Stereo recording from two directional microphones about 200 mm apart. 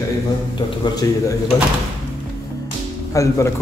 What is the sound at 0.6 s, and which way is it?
Speech, 20° left (ahead or behind).